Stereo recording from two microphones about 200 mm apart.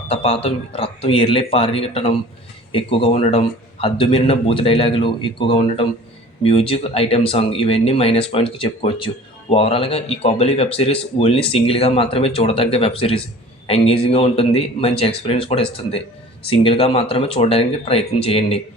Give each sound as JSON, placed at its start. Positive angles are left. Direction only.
{"t": 0.1, "sound": "speech", "side_deg": 30}